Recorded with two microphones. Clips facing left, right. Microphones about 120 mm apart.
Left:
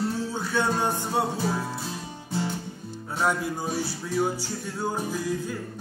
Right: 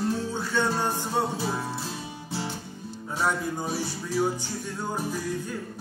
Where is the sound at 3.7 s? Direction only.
5° right (ahead or behind).